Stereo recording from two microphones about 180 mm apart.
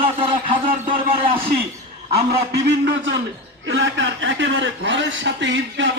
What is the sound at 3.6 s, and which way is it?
A man's voice, 90° right.